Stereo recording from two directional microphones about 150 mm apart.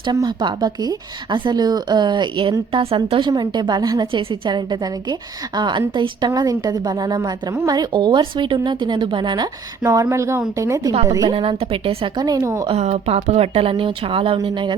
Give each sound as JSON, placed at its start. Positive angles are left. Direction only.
{"t": 0.0, "sound": "a woman's voice", "side_deg": -30}
{"t": 4.0, "sound": "a woman's voice", "side_deg": -35}
{"t": 11.3, "sound": "a woman's voice", "side_deg": -35}
{"t": 12.7, "sound": "a woman's voice", "side_deg": -45}